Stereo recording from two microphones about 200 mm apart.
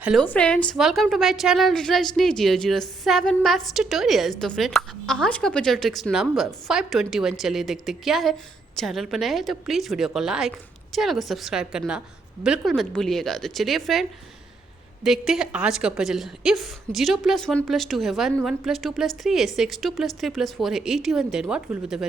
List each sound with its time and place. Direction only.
0.0 s a woman's voice: centre (ahead or behind)